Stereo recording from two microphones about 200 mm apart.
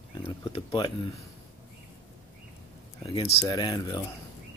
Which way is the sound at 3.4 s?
20° left (ahead or behind).